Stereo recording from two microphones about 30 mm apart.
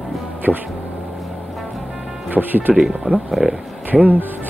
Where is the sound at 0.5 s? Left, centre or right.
Right.